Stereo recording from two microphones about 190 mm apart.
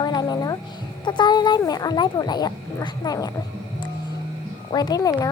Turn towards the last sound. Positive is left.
turn(degrees=20)  # may be behind; listen again after turning